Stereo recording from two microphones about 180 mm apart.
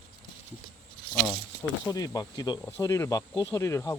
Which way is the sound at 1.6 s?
20° left (ahead or behind).